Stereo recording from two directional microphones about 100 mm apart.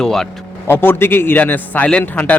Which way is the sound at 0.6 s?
25° left (ahead or behind).